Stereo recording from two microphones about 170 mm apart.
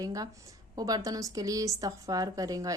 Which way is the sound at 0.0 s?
20° right (ahead or behind).